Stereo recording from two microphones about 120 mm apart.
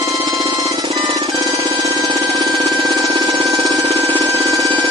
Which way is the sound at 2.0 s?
35° right (ahead or behind).